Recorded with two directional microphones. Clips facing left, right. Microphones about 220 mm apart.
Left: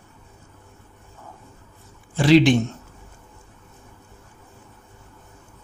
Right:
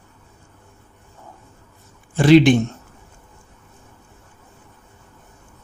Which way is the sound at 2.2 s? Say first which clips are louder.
Right 3 dB; 50° right (ahead or behind).